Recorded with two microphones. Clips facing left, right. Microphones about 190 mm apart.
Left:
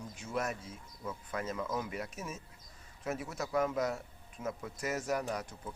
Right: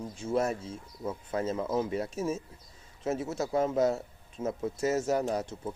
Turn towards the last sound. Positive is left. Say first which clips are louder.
# right 7 dB
turn(degrees=-25)  # may be behind; listen again after turning